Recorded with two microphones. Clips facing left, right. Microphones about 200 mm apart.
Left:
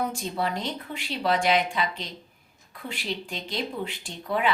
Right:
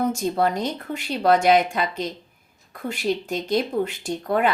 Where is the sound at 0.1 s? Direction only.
45° right (ahead or behind).